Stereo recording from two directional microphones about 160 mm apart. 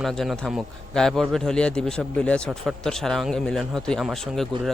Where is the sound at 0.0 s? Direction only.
Centre (ahead or behind).